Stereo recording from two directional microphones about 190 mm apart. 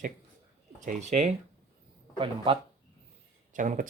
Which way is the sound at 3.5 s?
45° right (ahead or behind).